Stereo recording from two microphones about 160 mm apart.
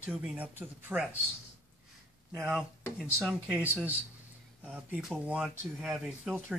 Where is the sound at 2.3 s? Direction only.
5° right (ahead or behind).